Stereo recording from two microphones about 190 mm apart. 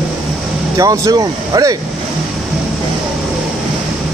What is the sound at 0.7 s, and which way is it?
Speech, 20° right (ahead or behind).